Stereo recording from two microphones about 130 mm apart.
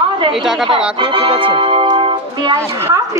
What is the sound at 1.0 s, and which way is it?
Speech, 40° right (ahead or behind).